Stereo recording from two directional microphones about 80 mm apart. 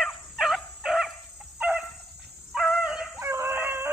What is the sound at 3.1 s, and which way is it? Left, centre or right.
Howl, right.